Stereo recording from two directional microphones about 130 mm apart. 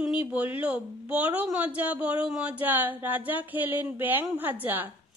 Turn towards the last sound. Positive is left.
turn(degrees=-15)  # may be behind; listen again after turning